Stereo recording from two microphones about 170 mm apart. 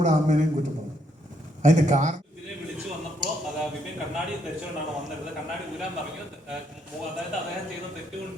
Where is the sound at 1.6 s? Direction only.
45° right (ahead or behind).